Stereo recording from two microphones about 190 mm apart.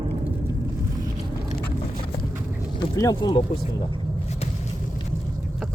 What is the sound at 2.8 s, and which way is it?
Speech, 20° left (ahead or behind).